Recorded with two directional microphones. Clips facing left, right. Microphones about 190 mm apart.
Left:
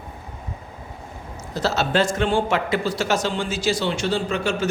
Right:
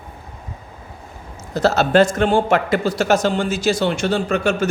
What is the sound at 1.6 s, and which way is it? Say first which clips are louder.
Speech: right 7 dB; 50° right (ahead or behind).